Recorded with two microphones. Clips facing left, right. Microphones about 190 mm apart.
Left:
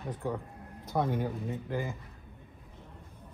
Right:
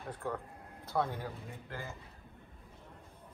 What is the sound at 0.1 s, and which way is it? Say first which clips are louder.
Speech: left 4 dB; 15° left (ahead or behind).